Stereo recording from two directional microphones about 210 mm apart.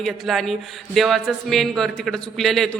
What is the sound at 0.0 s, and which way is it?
A woman's voice, centre (ahead or behind).